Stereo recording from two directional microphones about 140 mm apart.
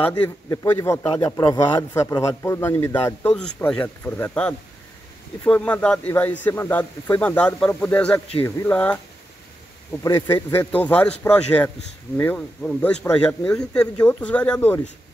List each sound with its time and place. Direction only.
0.7 s a man's voice: 20° left (ahead or behind)
8.5 s speech: 20° left (ahead or behind)
8.7 s a man's voice: 10° left (ahead or behind)
10.0 s a man's voice: 20° left (ahead or behind)